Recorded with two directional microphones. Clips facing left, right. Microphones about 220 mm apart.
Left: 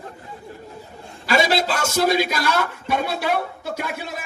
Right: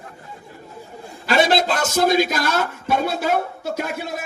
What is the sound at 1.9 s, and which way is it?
Speech, 45° right (ahead or behind).